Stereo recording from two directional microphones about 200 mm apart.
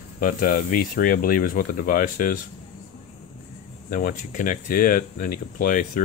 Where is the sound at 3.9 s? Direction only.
40° left (ahead or behind).